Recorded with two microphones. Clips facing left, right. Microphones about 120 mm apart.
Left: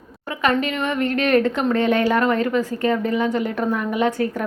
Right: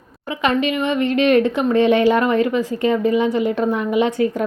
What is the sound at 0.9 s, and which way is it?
Speech, 55° left (ahead or behind).